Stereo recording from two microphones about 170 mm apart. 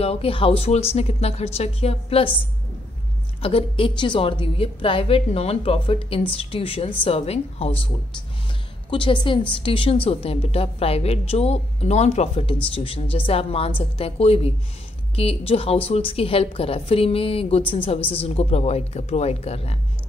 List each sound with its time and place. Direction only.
0.0 s a woman's voice: 35° left (ahead or behind)
3.4 s a woman's voice: 35° left (ahead or behind)
8.9 s a woman's voice: 30° left (ahead or behind)